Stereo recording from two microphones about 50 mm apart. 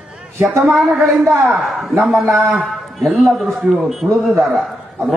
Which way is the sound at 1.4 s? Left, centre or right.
Centre.